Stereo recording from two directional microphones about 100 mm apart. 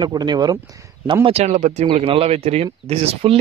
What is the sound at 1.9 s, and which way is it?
Speech, 75° right (ahead or behind).